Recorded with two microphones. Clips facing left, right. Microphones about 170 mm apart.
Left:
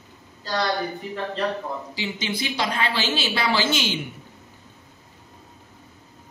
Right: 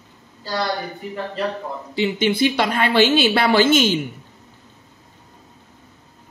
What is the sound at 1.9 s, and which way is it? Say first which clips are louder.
A woman's voice: right 14 dB; 60° right (ahead or behind).